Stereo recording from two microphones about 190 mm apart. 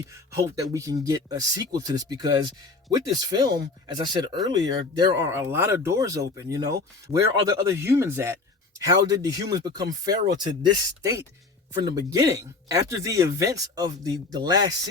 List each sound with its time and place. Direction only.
0.1 s speech: 15° right (ahead or behind)